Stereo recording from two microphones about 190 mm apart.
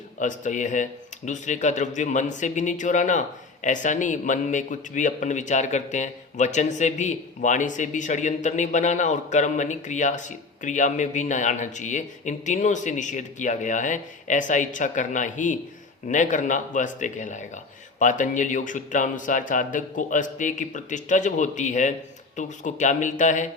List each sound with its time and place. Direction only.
0.2 s speech: 40° left (ahead or behind)